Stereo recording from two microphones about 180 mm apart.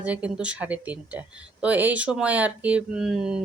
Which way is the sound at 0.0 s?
5° right (ahead or behind).